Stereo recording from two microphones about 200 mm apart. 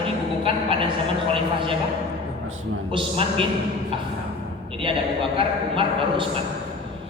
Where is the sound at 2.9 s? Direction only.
25° right (ahead or behind).